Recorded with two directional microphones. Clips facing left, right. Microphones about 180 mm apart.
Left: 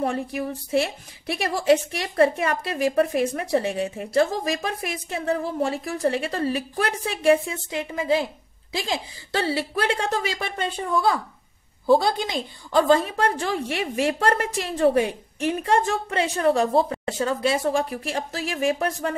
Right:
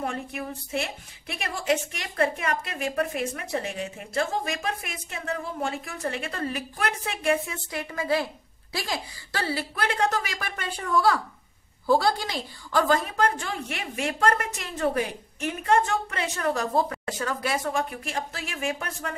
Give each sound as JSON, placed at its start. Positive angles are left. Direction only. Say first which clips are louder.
{"t": 0.0, "sound": "a woman's voice", "louder": "left 6 dB", "side_deg": 35}